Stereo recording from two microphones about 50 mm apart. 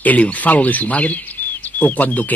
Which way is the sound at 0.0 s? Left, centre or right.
Left.